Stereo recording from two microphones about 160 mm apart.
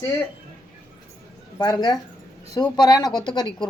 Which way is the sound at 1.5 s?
25° left (ahead or behind).